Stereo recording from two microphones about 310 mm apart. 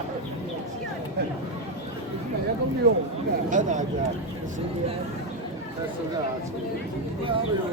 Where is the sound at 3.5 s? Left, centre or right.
Right.